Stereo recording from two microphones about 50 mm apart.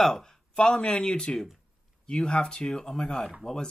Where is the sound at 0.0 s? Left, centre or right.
Centre.